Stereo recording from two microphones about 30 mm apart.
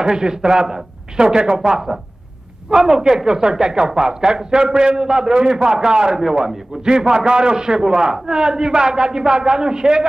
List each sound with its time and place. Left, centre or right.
0.0 s a man's voice: right